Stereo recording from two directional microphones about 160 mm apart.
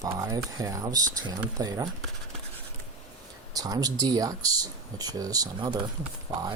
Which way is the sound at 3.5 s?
20° right (ahead or behind).